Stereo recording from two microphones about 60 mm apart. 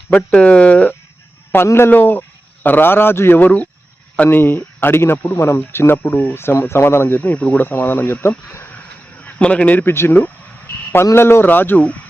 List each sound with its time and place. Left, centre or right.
0.3 s speech: left
1.6 s speech: left
3.4 s speech: left
4.2 s speech: left
7.2 s speech: left
7.6 s speech: left
9.2 s a man's voice: left
9.8 s a man's voice: left